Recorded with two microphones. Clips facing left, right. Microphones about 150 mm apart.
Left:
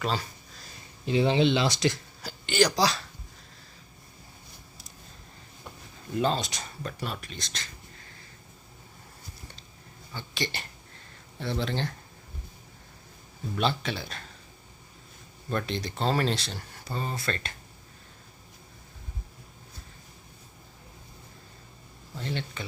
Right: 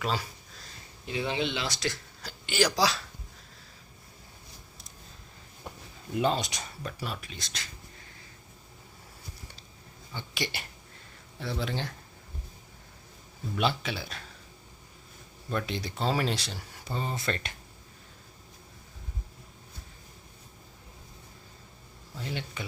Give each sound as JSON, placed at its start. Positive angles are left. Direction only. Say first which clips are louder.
{"t": 0.0, "sound": "speech", "louder": "left 1 dB", "side_deg": -5}
{"t": 1.0, "sound": "speech", "louder": "left 8 dB", "side_deg": 30}
{"t": 2.2, "sound": "speech", "louder": "left 3 dB", "side_deg": -5}
{"t": 6.1, "sound": "speech", "louder": "even", "side_deg": -15}
{"t": 10.2, "sound": "speech", "louder": "left 1 dB", "side_deg": -10}
{"t": 13.6, "sound": "speech", "louder": "left 1 dB", "side_deg": -10}
{"t": 15.4, "sound": "speech", "louder": "left 2 dB", "side_deg": -5}
{"t": 22.2, "sound": "speech", "louder": "left 2 dB", "side_deg": -10}